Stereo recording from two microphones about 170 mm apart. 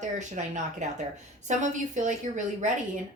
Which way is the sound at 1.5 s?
45° right (ahead or behind).